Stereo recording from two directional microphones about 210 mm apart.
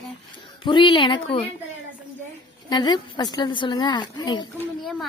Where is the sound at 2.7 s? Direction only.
20° left (ahead or behind).